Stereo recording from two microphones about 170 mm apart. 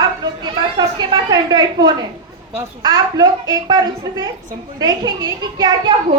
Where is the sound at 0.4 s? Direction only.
25° right (ahead or behind).